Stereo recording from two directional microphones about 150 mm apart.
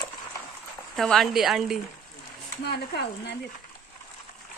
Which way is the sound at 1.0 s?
Centre (ahead or behind).